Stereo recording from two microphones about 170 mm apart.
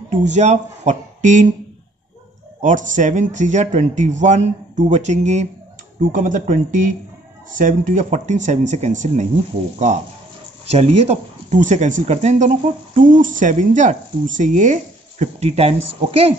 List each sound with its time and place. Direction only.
0.1 s speech: 45° right (ahead or behind)
2.6 s speech: 50° right (ahead or behind)
10.7 s speech: 40° right (ahead or behind)